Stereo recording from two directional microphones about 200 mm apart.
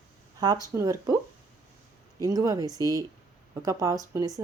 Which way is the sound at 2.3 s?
15° right (ahead or behind).